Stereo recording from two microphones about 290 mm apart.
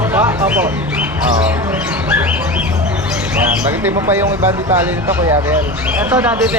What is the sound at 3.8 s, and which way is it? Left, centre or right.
Speech, centre.